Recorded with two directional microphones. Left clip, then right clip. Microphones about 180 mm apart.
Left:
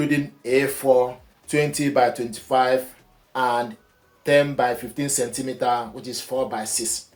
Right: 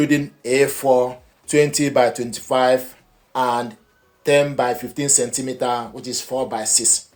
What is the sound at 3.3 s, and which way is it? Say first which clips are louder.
Speech: right 2 dB; 45° right (ahead or behind).